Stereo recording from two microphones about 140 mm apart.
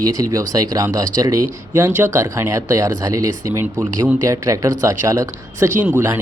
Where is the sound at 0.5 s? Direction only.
25° right (ahead or behind).